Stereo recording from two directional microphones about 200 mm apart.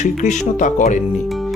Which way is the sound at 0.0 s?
35° left (ahead or behind).